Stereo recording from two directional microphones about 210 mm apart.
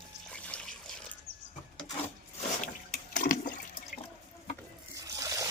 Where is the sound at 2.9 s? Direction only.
35° left (ahead or behind).